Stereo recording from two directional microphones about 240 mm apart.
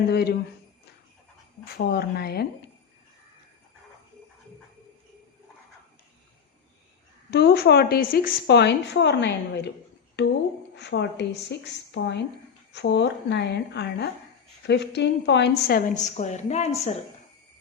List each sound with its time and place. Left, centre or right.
0.1 s a woman's voice: left
1.6 s a woman's voice: left
7.3 s a woman's voice: left
10.8 s a woman's voice: left